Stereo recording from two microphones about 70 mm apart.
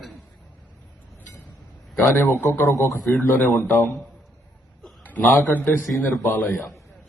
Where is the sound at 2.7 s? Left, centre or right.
Left.